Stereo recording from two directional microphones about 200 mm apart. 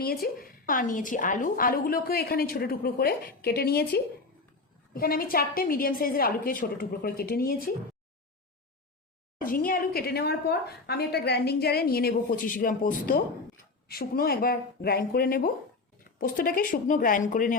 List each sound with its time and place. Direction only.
0.0 s a sound: 50° left (ahead or behind)
0.7 s a woman's voice: 40° left (ahead or behind)
9.4 s a woman's voice: 45° left (ahead or behind)